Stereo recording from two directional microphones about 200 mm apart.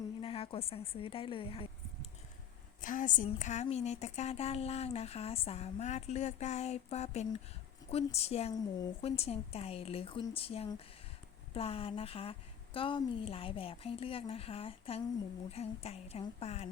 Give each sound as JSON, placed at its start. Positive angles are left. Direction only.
{"t": 0.2, "sound": "a woman's voice", "side_deg": 25}
{"t": 2.8, "sound": "a woman's voice", "side_deg": 40}